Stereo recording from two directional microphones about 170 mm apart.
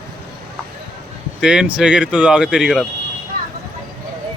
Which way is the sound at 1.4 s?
5° right (ahead or behind).